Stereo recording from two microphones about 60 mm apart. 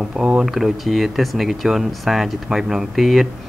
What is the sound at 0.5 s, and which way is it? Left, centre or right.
Speech, centre.